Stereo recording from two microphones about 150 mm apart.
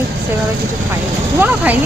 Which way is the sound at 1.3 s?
10° right (ahead or behind).